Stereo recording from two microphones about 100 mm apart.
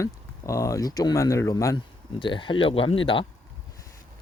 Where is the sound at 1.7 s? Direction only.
55° left (ahead or behind).